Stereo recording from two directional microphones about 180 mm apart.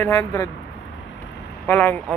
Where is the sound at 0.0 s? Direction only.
20° left (ahead or behind).